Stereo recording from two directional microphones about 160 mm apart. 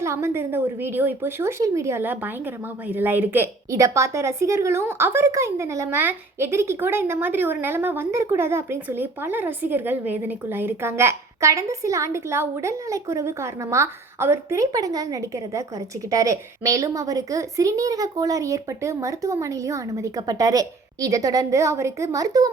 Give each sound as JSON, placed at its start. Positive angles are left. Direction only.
{"t": 0.0, "sound": "a woman's voice", "side_deg": -15}